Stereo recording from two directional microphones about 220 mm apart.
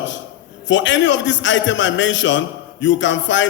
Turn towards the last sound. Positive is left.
turn(degrees=55)  # may be behind; listen again after turning